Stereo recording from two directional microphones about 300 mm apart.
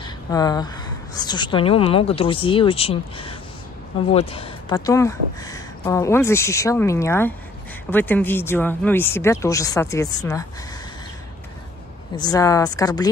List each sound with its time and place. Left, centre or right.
0.0 s a sound: centre
1.1 s speech: centre
12.2 s speech: centre